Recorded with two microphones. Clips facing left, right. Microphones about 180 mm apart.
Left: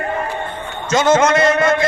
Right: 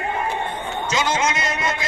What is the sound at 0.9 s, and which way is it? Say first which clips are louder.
Speech: left 10 dB; 50° left (ahead or behind).